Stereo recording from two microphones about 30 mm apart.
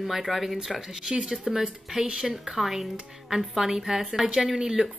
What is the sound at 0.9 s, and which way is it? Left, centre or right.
Speech, right.